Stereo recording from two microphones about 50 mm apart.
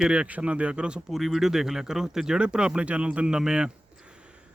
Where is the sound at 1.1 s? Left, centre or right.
Centre.